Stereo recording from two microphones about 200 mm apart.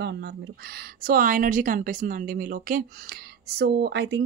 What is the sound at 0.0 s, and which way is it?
Speech, 55° right (ahead or behind).